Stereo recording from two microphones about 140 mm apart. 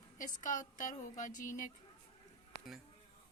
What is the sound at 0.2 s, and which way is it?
A woman's voice, 65° left (ahead or behind).